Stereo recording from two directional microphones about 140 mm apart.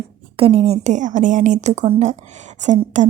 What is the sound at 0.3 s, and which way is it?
Speech, 45° right (ahead or behind).